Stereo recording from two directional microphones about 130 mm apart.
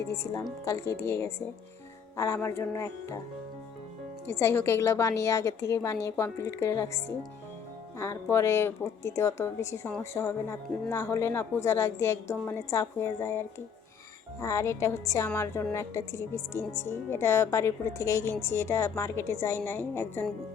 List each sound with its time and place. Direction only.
0.0 s speech: 20° left (ahead or behind)
4.3 s speech: 20° left (ahead or behind)
14.4 s speech: 25° left (ahead or behind)